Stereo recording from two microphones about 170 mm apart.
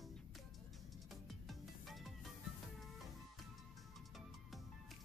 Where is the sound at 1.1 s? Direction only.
Centre (ahead or behind).